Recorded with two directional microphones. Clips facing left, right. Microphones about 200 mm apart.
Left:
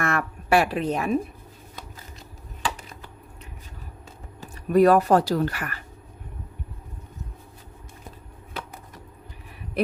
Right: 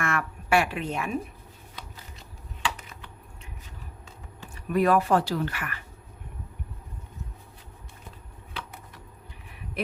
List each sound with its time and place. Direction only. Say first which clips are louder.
0.0 s speech: left 3 dB; 40° left (ahead or behind)
4.4 s speech: left 7 dB; 40° left (ahead or behind)
8.6 s a sound: left 4 dB; 45° left (ahead or behind)